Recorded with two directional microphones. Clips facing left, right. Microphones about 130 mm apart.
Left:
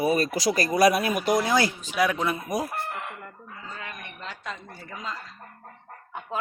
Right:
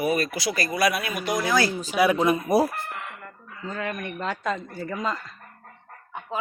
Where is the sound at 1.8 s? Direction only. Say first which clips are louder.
Right 4 dB; 5° right (ahead or behind).